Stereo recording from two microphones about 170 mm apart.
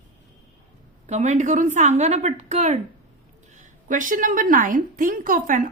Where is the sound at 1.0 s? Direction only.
45° right (ahead or behind).